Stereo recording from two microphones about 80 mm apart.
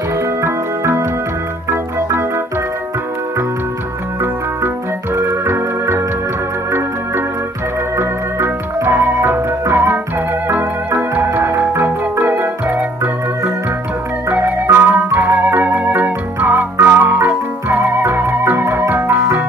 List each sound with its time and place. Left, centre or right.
0.4 s music: right
5.4 s organ: right
8.0 s music: right
10.5 s organ: right
11.2 s music: right
11.7 s organ: right
14.3 s music: right